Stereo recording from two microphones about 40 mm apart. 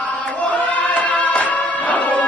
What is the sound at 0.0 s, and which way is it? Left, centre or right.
Music, left.